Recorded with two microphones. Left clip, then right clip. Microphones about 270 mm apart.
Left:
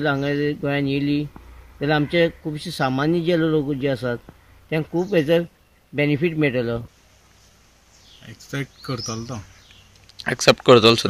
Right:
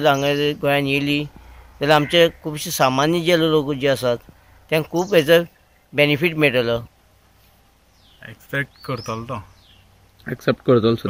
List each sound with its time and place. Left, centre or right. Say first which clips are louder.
0.0 s speech: right 5 dB; centre
8.5 s speech: right 5 dB; right
10.2 s speech: left 5 dB; centre